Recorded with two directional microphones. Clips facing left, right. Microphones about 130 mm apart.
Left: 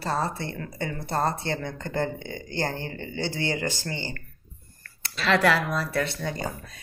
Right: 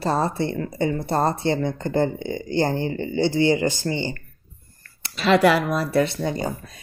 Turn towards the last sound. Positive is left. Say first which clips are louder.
# right 7 dB
turn(degrees=-20)  # may be behind; listen again after turning